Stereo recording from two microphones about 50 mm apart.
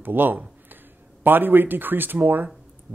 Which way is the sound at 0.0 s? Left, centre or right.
Right.